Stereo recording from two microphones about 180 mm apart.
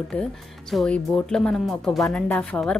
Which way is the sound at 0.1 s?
5° left (ahead or behind).